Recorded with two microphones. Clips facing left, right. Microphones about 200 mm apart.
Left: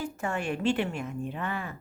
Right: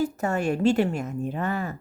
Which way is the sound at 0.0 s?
40° right (ahead or behind).